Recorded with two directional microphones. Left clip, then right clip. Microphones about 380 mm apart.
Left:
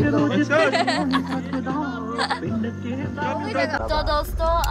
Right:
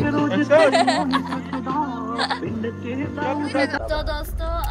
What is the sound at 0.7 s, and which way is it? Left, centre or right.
Female singing, centre.